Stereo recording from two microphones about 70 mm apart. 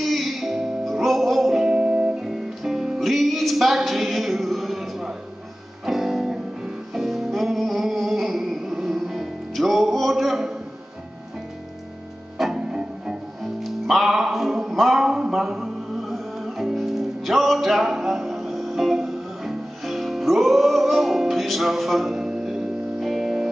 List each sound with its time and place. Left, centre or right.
0.0 s music: centre
1.7 s music: centre
2.2 s music: centre
12.4 s music: centre